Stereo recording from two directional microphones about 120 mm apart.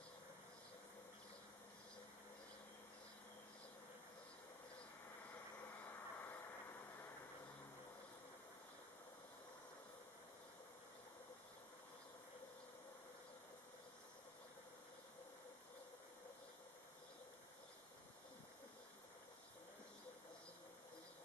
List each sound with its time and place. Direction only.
5.3 s vehicle: 15° left (ahead or behind)